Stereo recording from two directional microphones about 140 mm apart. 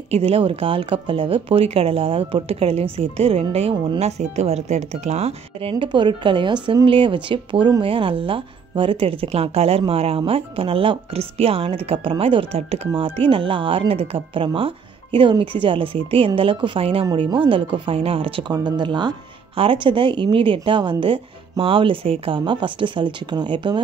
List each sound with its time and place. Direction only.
0.1 s speech: 45° right (ahead or behind)